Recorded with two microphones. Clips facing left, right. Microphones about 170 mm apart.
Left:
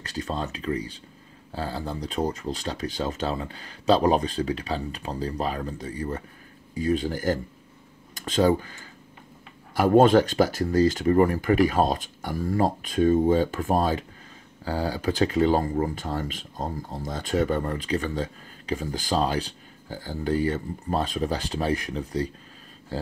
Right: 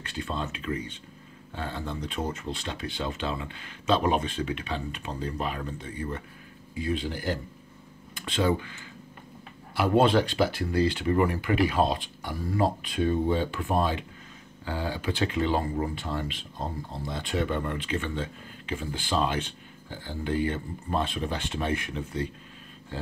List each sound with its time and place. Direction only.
0.0 s speech: 40° left (ahead or behind)